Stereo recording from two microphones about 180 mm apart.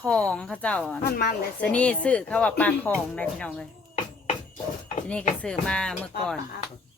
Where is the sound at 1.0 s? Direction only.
55° left (ahead or behind).